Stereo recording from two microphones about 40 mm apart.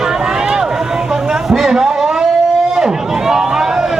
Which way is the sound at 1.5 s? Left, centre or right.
Centre.